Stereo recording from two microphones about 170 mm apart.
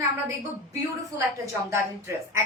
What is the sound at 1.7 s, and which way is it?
Speech, 15° right (ahead or behind).